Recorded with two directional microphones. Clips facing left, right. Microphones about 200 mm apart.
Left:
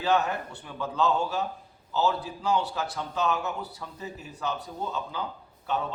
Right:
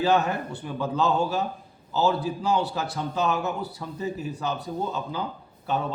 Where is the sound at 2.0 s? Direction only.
40° right (ahead or behind).